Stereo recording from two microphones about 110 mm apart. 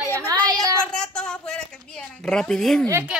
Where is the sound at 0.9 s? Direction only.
5° left (ahead or behind).